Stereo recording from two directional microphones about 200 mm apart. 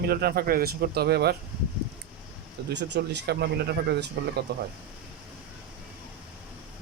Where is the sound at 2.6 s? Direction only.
60° right (ahead or behind).